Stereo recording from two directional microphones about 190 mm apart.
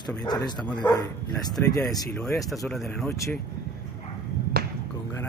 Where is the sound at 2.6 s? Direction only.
Centre (ahead or behind).